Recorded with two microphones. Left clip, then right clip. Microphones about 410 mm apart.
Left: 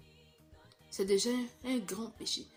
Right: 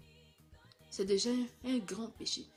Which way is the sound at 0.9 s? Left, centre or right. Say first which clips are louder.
Left 2 dB; right.